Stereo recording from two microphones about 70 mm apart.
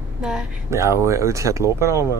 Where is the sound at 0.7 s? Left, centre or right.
Right.